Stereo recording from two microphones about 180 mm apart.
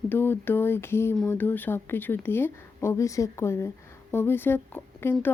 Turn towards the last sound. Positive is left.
turn(degrees=10)  # may be behind; listen again after turning